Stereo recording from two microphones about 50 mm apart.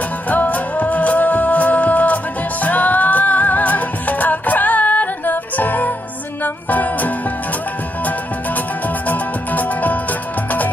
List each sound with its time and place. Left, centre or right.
0.3 s music: left
8.5 s music: left